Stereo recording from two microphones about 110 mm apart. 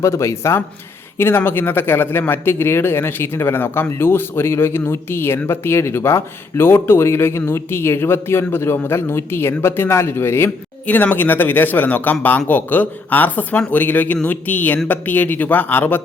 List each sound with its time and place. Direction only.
0.0 s speech: 25° left (ahead or behind)